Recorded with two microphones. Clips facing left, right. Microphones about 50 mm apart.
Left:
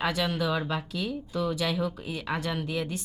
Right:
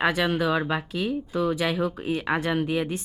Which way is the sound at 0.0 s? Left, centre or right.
Right.